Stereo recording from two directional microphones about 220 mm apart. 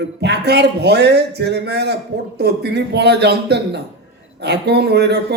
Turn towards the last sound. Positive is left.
turn(degrees=-50)  # may be behind; listen again after turning